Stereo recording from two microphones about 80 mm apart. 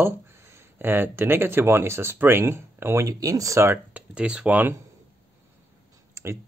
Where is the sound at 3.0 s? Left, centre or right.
Right.